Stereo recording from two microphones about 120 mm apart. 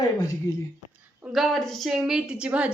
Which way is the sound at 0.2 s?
30° left (ahead or behind).